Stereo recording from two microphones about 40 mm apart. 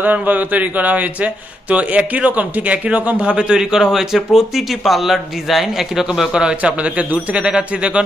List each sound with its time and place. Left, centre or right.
0.0 s speech: right; by 6.2 s centre
6.6 s speech: right